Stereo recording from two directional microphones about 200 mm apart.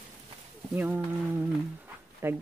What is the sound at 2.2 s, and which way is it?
Speech, 10° right (ahead or behind).